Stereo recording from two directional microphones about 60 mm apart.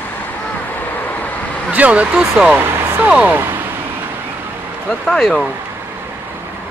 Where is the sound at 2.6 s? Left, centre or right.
Right.